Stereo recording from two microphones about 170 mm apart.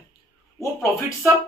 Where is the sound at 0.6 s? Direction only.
15° left (ahead or behind).